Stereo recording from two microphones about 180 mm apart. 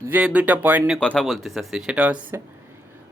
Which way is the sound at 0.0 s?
10° right (ahead or behind).